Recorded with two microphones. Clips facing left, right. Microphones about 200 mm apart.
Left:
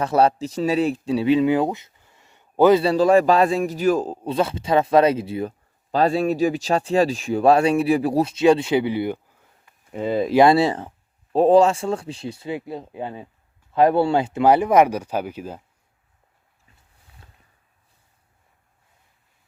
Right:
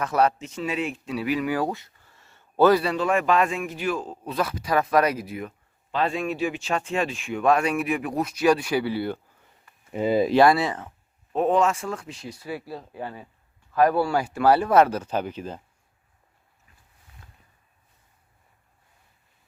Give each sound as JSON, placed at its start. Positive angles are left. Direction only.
{"t": 0.0, "sound": "speech", "side_deg": 30}
{"t": 2.8, "sound": "a man's voice", "side_deg": 35}
{"t": 9.9, "sound": "speech", "side_deg": -5}
{"t": 10.3, "sound": "speech", "side_deg": 25}